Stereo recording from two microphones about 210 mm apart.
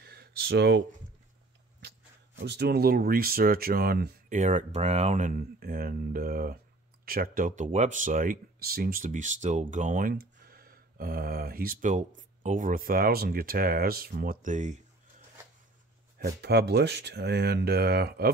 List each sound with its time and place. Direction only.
0.0 s a sound: 50° right (ahead or behind)
1.8 s speech: 50° right (ahead or behind); by 14.8 s 35° right (ahead or behind)
16.2 s speech: 50° right (ahead or behind)